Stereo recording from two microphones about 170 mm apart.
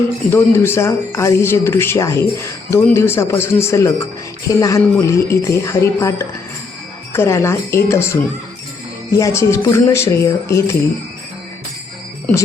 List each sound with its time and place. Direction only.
0.3 s speech: 15° left (ahead or behind)